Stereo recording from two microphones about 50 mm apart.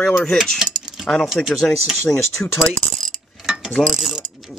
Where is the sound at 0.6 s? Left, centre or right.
Centre.